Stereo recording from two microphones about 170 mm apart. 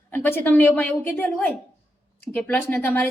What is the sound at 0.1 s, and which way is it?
A woman's voice, 10° left (ahead or behind).